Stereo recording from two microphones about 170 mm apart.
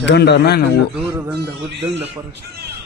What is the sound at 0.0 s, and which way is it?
Speech, 85° left.